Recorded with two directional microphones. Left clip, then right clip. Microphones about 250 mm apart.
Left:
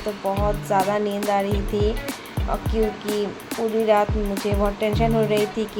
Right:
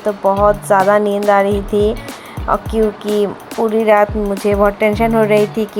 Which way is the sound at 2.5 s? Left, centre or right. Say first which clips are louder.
Right 11 dB; right.